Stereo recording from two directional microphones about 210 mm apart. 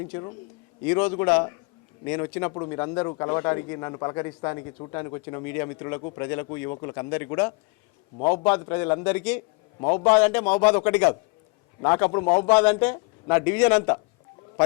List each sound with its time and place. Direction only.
0.1 s speech: 25° left (ahead or behind)
0.9 s a man's voice: 10° left (ahead or behind)